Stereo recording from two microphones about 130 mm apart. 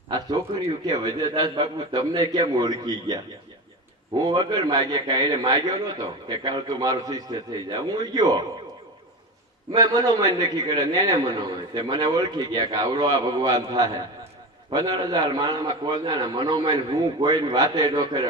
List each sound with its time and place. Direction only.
0.9 s a man's voice: 30° right (ahead or behind)
4.2 s a man's voice: 30° right (ahead or behind)
9.7 s a man's voice: 30° right (ahead or behind)